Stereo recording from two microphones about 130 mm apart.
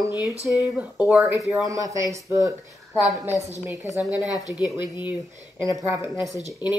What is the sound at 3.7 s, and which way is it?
Speech, 15° right (ahead or behind).